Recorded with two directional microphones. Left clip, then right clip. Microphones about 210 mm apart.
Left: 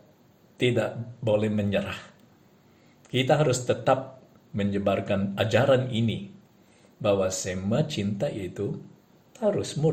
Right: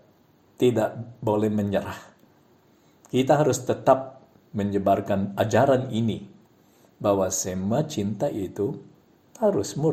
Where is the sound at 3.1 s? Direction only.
35° right (ahead or behind).